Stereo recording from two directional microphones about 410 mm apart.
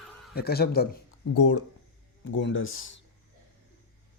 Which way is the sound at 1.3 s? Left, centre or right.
Left.